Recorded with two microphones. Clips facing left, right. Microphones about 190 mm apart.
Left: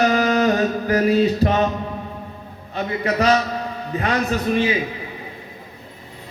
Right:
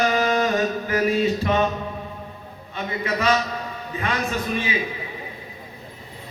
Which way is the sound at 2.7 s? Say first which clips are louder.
Left 5 dB; 40° left (ahead or behind).